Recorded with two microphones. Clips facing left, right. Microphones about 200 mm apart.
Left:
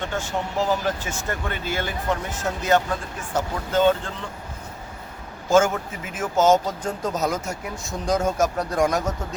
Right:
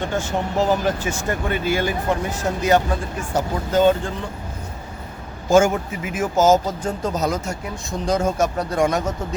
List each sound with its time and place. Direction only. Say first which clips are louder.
0.1 s speech: right 4 dB; 15° right (ahead or behind)
5.5 s a man's voice: right 3 dB; 15° right (ahead or behind)